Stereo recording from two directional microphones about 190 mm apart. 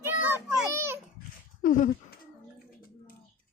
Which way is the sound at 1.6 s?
45° left (ahead or behind).